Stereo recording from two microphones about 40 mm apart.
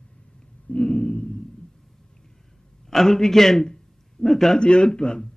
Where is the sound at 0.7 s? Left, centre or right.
Left.